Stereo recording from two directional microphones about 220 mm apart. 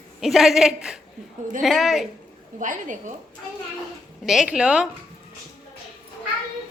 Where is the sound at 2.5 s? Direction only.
35° right (ahead or behind).